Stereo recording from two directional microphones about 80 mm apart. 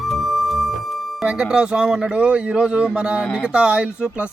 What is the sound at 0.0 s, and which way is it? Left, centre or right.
Speech, centre.